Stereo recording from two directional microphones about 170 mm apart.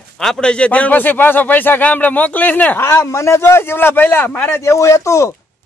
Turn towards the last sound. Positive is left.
turn(degrees=20)  # may be behind; listen again after turning